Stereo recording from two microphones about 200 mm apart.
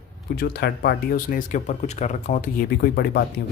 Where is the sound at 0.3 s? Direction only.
50° left (ahead or behind).